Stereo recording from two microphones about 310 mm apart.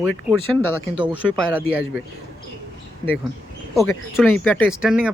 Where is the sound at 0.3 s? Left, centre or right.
Centre.